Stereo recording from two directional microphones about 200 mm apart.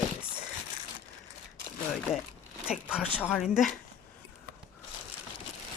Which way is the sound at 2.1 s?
10° left (ahead or behind).